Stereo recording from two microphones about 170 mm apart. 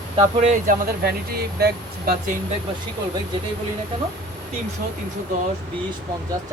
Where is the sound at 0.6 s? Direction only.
65° right (ahead or behind).